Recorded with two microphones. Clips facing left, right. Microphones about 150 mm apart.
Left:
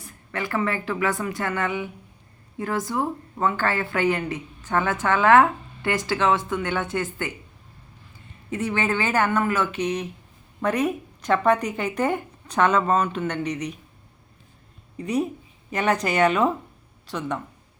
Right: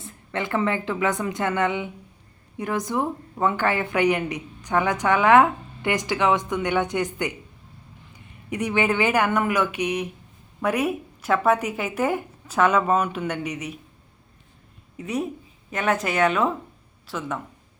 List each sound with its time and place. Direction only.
0.0 s a woman's voice: 20° right (ahead or behind)
8.4 s a woman's voice: 15° right (ahead or behind)
14.9 s speech: centre (ahead or behind)